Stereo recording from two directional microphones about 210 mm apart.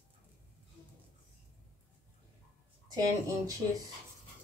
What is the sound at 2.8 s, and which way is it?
Speech, 15° right (ahead or behind).